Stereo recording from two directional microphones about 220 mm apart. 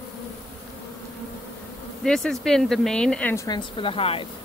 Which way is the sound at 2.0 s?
Centre (ahead or behind).